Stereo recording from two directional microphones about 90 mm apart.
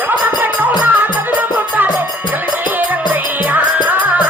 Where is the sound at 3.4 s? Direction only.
20° right (ahead or behind).